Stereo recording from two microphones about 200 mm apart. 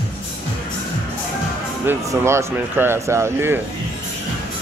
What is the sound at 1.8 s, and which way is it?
Speech, 15° right (ahead or behind).